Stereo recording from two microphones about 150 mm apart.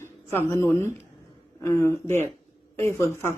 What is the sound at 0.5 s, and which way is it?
Speech, 15° left (ahead or behind).